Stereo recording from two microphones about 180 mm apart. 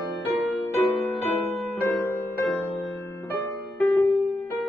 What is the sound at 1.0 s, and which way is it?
Music, 10° left (ahead or behind).